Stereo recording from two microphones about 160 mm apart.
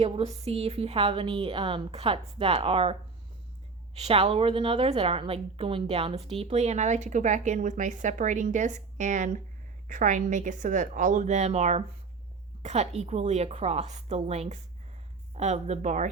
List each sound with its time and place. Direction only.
0.0 s a woman's voice: 40° right (ahead or behind)
3.9 s a woman's voice: 40° right (ahead or behind)